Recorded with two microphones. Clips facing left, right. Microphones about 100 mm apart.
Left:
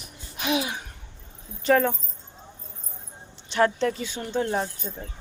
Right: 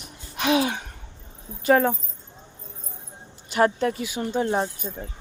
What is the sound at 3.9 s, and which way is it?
Speech, 10° right (ahead or behind).